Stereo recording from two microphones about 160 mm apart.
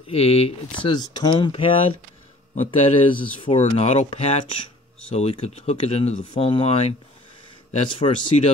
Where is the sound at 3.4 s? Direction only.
35° left (ahead or behind).